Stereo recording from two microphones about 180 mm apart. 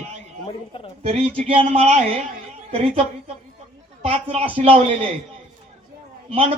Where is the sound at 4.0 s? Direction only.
30° right (ahead or behind).